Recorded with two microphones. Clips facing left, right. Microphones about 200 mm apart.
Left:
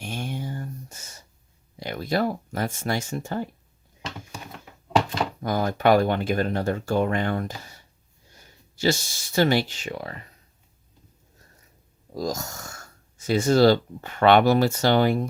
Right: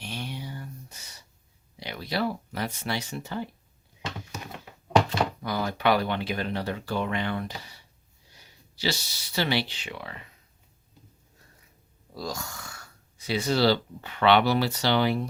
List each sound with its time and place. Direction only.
0.0 s a sound: 50° left (ahead or behind)
1.8 s speech: 50° left (ahead or behind)
5.4 s speech: 45° left (ahead or behind)
12.1 s speech: 45° left (ahead or behind)